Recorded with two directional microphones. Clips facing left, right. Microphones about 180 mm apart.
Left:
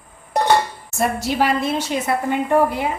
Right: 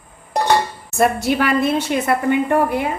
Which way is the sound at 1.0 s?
60° right (ahead or behind).